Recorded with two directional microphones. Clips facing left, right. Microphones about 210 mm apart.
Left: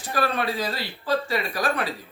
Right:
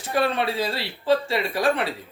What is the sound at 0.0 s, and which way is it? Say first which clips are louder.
Speech: right 2 dB; 25° right (ahead or behind).